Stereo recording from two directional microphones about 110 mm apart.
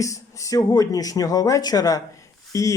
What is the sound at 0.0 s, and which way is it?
Speech, 30° left (ahead or behind).